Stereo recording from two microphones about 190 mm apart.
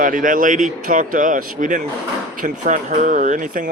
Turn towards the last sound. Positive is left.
turn(degrees=-45)  # may be behind; listen again after turning